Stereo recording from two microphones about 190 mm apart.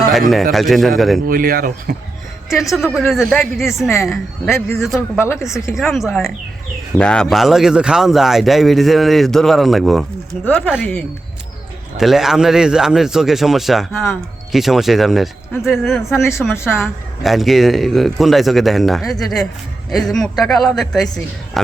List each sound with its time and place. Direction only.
0.1 s a man's voice: centre (ahead or behind)
1.3 s speech: 50° right (ahead or behind)
2.6 s speech: centre (ahead or behind)
4.9 s speech: 15° left (ahead or behind)
5.8 s speech: centre (ahead or behind)